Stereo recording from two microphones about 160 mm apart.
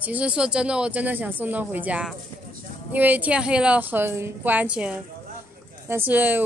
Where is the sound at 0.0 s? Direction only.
10° right (ahead or behind).